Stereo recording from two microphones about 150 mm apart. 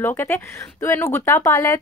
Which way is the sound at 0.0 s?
15° left (ahead or behind).